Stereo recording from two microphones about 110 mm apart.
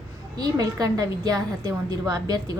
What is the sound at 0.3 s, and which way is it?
A woman's voice, 35° right (ahead or behind).